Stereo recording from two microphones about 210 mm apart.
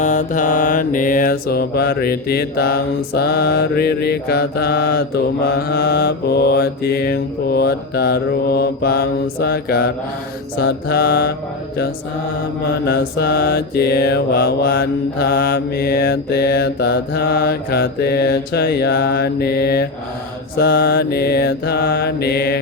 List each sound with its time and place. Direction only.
0.0 s mantra: 35° left (ahead or behind)
12.8 s mantra: 50° left (ahead or behind)